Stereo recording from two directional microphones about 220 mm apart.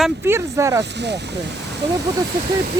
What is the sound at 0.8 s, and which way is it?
Speech, 50° right (ahead or behind).